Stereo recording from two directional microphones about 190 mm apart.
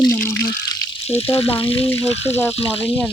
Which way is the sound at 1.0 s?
30° left (ahead or behind).